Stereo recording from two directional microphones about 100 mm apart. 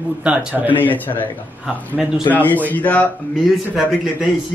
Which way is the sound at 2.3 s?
15° left (ahead or behind).